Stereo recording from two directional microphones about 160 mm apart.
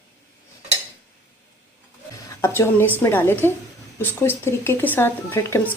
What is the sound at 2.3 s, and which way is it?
A woman's voice, 15° left (ahead or behind).